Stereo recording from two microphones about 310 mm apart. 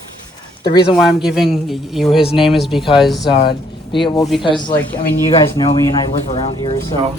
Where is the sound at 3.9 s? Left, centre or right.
Centre.